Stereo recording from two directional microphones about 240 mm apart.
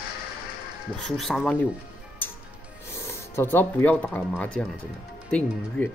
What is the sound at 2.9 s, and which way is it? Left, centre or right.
Speech, centre.